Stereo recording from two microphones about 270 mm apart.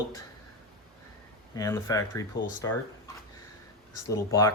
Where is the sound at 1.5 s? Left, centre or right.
Centre.